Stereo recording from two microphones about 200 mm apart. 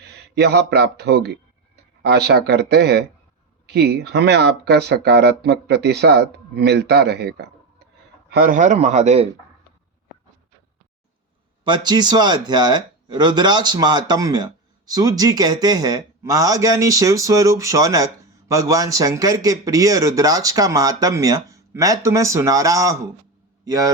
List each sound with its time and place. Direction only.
0.0 s a man's voice: 55° right (ahead or behind); by 9.3 s 35° right (ahead or behind)
11.6 s a man's voice: 20° right (ahead or behind)